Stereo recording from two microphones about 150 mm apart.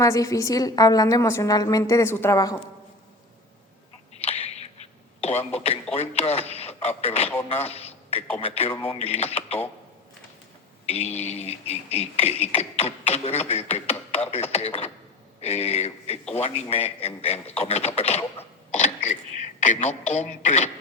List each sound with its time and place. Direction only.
0.0 s a woman's voice: 20° left (ahead or behind)
4.1 s a sound: 45° left (ahead or behind)
5.9 s a man's voice: 45° left (ahead or behind)
10.8 s speech: 45° left (ahead or behind)